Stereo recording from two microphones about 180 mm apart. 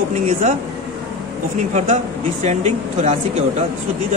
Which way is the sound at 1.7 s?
40° right (ahead or behind).